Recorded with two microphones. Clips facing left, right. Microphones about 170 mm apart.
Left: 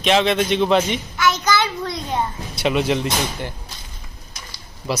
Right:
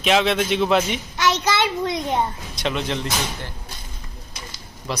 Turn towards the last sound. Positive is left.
turn(degrees=10)  # may be behind; listen again after turning